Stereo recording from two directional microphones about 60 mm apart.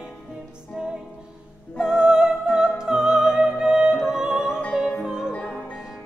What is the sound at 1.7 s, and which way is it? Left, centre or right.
Music, centre.